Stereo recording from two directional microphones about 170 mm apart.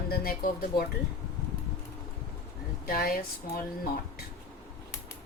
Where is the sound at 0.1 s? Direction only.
60° left (ahead or behind).